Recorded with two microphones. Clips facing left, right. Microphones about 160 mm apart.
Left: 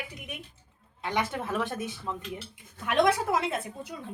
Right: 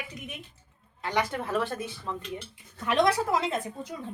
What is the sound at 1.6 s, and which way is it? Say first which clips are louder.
Speech: even; 15° left (ahead or behind).